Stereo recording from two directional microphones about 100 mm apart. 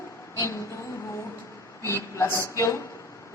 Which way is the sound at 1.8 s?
25° left (ahead or behind).